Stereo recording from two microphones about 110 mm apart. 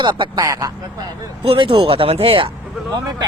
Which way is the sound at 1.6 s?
50° right (ahead or behind).